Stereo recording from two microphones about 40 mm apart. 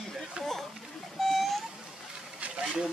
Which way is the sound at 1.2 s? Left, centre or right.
Centre.